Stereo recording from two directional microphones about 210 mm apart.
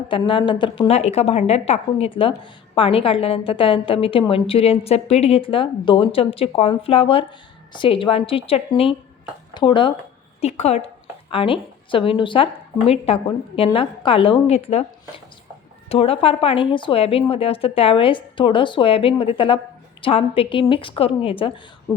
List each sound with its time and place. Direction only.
0.1 s a woman's voice: 25° left (ahead or behind)
15.9 s a woman's voice: 25° left (ahead or behind)